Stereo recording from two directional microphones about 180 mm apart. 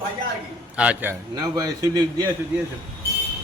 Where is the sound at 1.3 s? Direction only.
20° right (ahead or behind).